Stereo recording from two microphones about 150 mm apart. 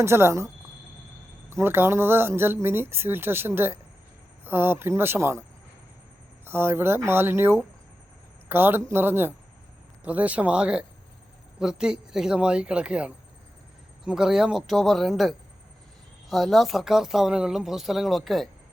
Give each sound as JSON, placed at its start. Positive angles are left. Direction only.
{"t": 0.0, "sound": "speech", "side_deg": -15}
{"t": 1.5, "sound": "speech", "side_deg": -15}